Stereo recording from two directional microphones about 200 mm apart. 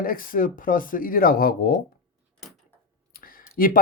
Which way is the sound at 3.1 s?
45° left (ahead or behind).